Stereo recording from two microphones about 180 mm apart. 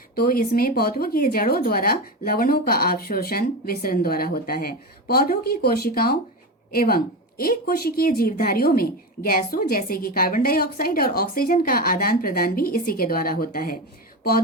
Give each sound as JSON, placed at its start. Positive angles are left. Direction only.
{"t": 0.2, "sound": "a woman's voice", "side_deg": 55}